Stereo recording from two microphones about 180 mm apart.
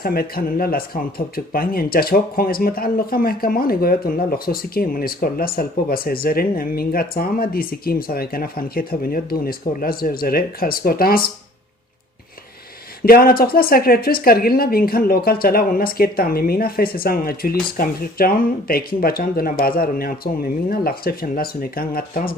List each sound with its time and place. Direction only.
0.0 s speech: 55° left (ahead or behind)
13.1 s speech: 55° left (ahead or behind)